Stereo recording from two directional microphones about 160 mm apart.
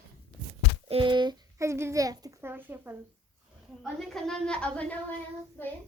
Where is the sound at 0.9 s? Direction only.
30° right (ahead or behind); by 2.9 s 15° right (ahead or behind).